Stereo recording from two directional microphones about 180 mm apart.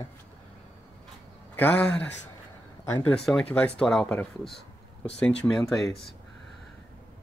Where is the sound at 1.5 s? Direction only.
10° left (ahead or behind).